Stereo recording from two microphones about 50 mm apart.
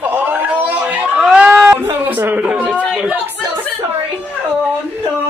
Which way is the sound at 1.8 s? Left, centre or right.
Right.